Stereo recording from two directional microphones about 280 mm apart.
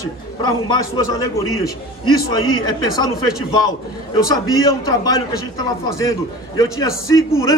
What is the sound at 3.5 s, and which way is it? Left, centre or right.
A man's voice, centre.